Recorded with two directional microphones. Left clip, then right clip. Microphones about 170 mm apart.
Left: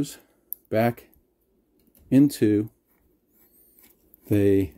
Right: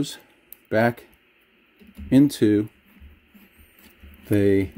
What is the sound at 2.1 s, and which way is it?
Speech, 15° right (ahead or behind).